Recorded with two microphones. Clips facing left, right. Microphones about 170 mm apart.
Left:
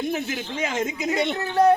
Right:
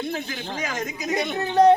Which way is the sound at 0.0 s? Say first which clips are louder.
Left 3 dB; 20° left (ahead or behind).